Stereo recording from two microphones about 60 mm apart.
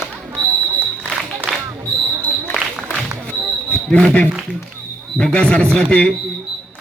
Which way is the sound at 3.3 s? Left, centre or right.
Centre.